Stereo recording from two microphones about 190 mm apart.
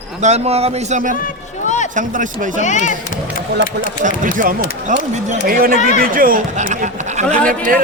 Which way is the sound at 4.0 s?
40° right (ahead or behind).